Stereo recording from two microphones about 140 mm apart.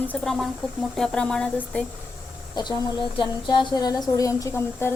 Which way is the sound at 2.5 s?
35° left (ahead or behind).